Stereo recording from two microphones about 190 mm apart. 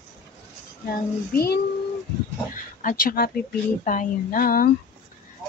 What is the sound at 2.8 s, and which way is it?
Speech, 50° left (ahead or behind).